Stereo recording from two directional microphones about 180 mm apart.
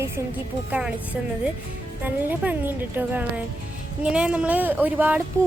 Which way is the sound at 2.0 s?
10° right (ahead or behind).